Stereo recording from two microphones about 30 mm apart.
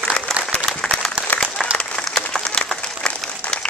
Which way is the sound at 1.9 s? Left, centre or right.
Centre.